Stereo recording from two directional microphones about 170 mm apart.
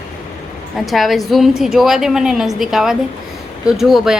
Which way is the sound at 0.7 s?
Centre (ahead or behind).